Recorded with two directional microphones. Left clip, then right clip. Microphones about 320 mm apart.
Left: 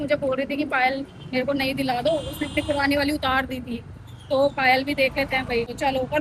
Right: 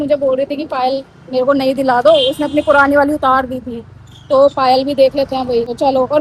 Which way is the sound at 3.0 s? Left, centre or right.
Centre.